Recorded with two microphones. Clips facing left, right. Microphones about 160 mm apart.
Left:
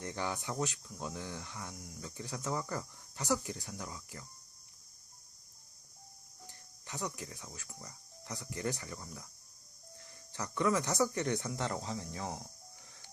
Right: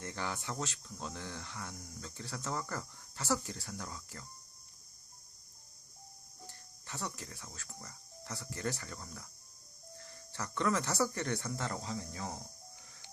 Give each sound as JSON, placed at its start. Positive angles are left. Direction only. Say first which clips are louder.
{"t": 0.0, "sound": "speech", "louder": "left 2 dB", "side_deg": 15}
{"t": 6.5, "sound": "speech", "louder": "left 2 dB", "side_deg": 15}